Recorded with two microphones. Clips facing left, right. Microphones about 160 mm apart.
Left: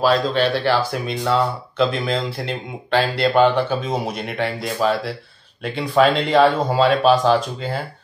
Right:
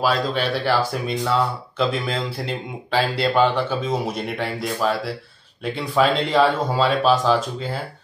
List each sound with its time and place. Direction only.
0.0 s speech: 5° right (ahead or behind)